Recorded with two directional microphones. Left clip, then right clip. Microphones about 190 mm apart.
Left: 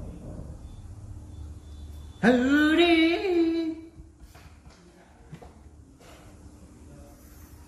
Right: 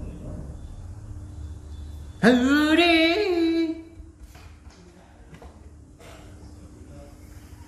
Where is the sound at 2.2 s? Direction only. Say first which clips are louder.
Right 2 dB; 50° right (ahead or behind).